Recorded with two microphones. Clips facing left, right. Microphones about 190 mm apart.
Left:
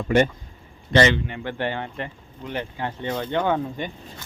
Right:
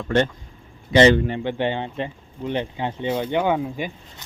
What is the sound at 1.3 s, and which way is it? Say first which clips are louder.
Speech: right 4 dB; 20° right (ahead or behind).